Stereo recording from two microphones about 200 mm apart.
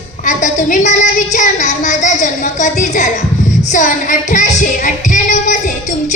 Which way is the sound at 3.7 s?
40° left (ahead or behind).